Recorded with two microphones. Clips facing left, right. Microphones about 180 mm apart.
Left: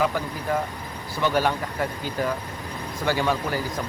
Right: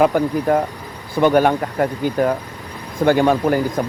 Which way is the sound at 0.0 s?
50° right (ahead or behind).